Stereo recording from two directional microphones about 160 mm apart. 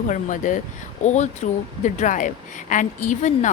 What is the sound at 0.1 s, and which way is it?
A woman's voice, 50° left (ahead or behind).